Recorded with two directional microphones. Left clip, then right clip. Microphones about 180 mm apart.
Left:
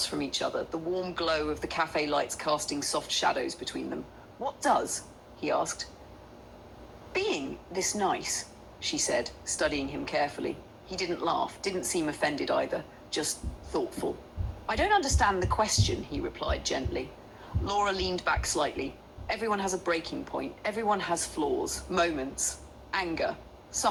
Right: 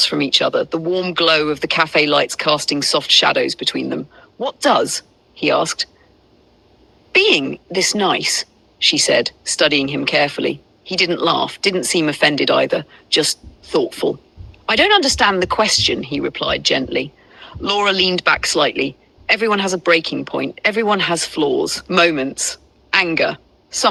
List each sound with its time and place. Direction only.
0.0 s a woman's voice: 45° right (ahead or behind)
7.1 s a woman's voice: 45° right (ahead or behind)